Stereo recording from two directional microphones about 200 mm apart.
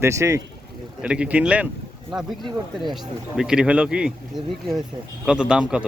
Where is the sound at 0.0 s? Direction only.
15° right (ahead or behind).